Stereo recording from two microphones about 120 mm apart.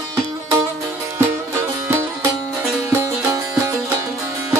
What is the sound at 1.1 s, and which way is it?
Music, 20° right (ahead or behind).